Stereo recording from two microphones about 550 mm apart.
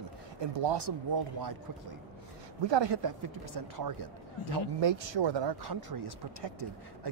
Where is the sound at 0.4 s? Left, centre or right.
Right.